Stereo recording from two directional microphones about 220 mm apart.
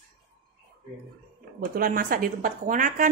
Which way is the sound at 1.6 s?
40° right (ahead or behind).